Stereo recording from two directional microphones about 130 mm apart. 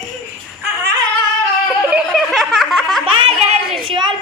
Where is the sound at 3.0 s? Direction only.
40° right (ahead or behind).